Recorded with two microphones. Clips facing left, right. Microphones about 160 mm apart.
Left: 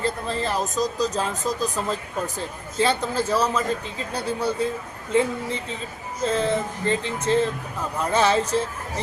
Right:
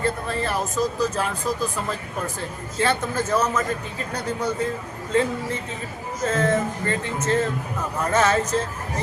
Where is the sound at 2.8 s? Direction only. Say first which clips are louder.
Left 1 dB; 15° left (ahead or behind).